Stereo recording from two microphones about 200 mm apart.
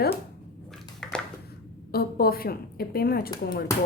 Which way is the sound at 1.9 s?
50° left (ahead or behind).